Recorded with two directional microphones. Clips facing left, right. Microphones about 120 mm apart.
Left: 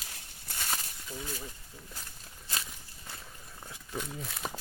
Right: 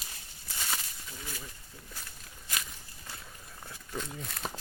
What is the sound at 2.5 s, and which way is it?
Walk, 30° left (ahead or behind).